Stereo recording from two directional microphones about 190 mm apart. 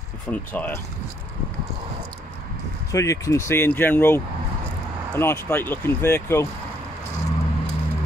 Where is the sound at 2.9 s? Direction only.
15° left (ahead or behind).